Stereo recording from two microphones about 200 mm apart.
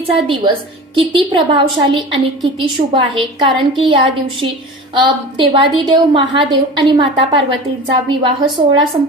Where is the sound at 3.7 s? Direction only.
25° right (ahead or behind).